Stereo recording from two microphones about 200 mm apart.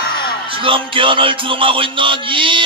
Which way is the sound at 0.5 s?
25° right (ahead or behind).